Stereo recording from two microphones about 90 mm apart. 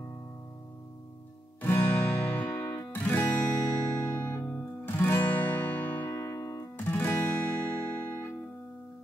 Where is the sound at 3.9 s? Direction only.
45° left (ahead or behind).